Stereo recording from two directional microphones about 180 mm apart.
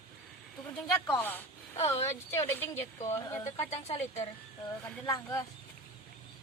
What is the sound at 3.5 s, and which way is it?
Speech, 35° left (ahead or behind).